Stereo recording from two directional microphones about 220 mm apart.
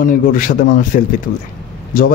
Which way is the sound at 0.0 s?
40° left (ahead or behind).